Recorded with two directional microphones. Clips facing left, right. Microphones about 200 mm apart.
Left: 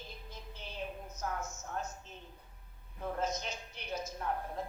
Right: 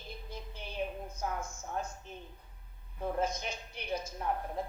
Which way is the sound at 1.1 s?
10° right (ahead or behind).